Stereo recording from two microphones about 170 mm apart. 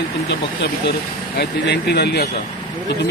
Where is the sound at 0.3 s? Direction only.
80° left.